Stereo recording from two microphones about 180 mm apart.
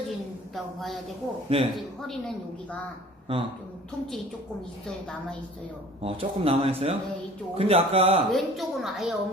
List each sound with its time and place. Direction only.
0.5 s a woman's voice: centre (ahead or behind)
1.5 s speech: 35° right (ahead or behind)
6.0 s speech: 30° right (ahead or behind)
8.3 s a woman's voice: centre (ahead or behind)